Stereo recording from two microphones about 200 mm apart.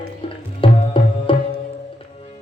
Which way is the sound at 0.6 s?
25° left (ahead or behind).